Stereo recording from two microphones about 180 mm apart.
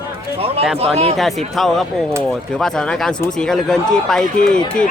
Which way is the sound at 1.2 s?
Centre (ahead or behind).